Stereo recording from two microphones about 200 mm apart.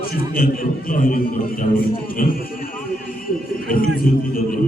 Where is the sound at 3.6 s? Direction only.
45° left (ahead or behind).